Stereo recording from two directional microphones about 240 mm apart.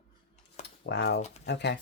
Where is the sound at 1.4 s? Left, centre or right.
Left.